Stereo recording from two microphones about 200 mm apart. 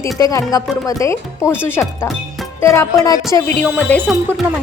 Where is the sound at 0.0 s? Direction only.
15° left (ahead or behind).